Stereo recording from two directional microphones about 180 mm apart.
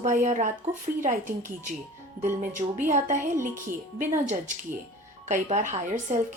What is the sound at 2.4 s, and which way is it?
A woman's voice, 45° right (ahead or behind).